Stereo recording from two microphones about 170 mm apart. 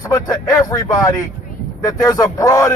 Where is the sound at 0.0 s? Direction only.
20° left (ahead or behind).